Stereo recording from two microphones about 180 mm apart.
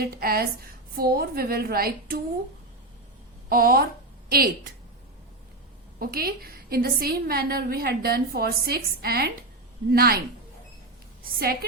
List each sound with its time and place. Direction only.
0.0 s a woman's voice: 55° right (ahead or behind)
3.5 s a woman's voice: 55° right (ahead or behind)
6.0 s a woman's voice: 55° right (ahead or behind)
11.2 s a woman's voice: 55° right (ahead or behind)